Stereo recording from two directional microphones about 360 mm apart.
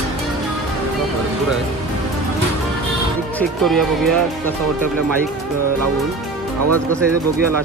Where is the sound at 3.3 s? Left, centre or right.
Centre.